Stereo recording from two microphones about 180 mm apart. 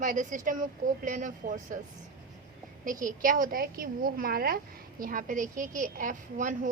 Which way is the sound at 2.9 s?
50° right (ahead or behind).